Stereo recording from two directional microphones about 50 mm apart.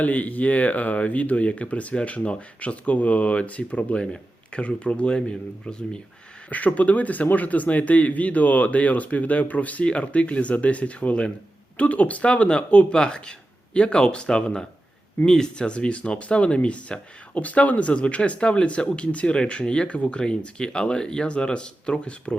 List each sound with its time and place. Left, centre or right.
0.0 s speech: left
6.5 s speech: left